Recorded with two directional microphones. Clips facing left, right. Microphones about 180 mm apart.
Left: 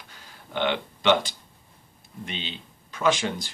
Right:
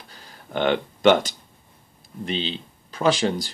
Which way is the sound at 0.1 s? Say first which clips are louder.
Right 4 dB; 45° right (ahead or behind).